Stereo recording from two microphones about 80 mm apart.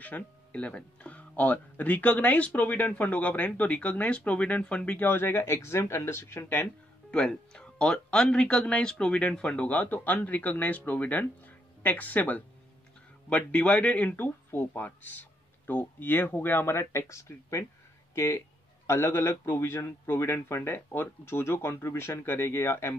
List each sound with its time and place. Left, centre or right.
0.0 s speech: centre
7.1 s speech: centre; by 22.9 s left